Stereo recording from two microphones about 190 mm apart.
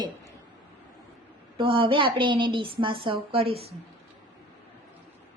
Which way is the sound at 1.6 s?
25° right (ahead or behind).